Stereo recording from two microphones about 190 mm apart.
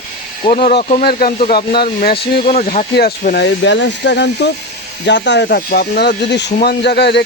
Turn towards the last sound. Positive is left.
turn(degrees=60)  # may be behind; listen again after turning